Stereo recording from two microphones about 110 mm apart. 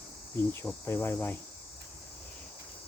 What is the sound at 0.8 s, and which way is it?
Speech, 25° left (ahead or behind).